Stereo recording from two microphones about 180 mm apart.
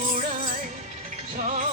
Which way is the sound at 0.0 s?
45° right (ahead or behind).